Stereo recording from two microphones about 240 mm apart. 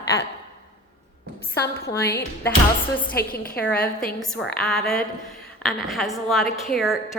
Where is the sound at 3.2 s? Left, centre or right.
Left.